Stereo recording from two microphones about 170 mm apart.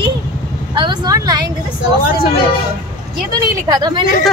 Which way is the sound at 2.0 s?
60° left (ahead or behind).